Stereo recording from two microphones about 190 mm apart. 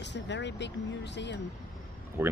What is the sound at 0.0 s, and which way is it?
Speech, 65° left (ahead or behind).